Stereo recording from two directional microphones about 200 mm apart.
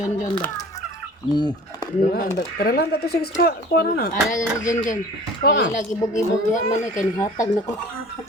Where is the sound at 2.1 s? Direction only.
40° left (ahead or behind).